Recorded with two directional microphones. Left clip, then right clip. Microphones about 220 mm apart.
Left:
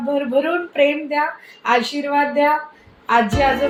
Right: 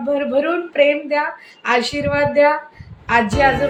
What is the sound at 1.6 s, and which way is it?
A woman's voice, 5° right (ahead or behind).